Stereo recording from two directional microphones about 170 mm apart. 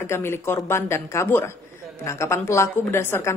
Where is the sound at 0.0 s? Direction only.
15° left (ahead or behind).